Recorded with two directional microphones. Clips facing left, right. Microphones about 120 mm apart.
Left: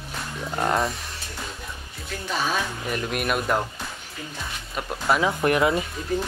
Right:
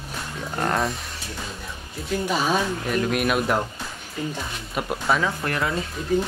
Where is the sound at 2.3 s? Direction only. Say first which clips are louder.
Right 2 dB; 15° right (ahead or behind).